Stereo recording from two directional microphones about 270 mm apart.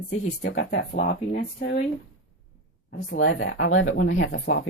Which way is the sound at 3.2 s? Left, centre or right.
Left.